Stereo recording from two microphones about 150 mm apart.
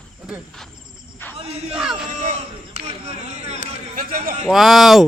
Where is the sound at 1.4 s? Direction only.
40° right (ahead or behind).